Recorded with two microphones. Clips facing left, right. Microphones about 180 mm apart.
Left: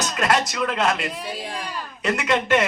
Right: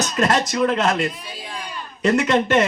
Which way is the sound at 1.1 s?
70° left (ahead or behind).